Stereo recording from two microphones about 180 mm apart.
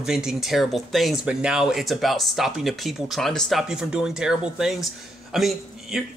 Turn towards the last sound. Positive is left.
turn(degrees=0)  # may be behind; listen again after turning